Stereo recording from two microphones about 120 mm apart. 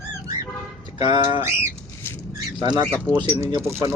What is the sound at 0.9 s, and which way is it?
Speech, 40° right (ahead or behind).